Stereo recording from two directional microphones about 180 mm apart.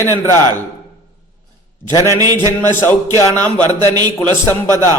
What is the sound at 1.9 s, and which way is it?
Speech, 15° left (ahead or behind).